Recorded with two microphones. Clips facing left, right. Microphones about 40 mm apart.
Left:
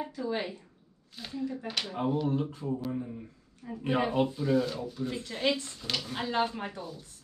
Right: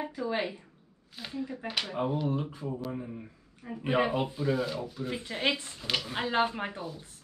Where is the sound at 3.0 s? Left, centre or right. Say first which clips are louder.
Left 1 dB; right.